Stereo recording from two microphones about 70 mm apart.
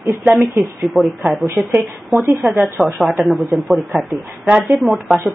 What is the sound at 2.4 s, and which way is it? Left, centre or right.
Speech, centre.